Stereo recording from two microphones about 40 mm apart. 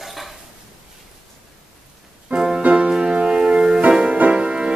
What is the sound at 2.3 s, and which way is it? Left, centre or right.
Music, centre.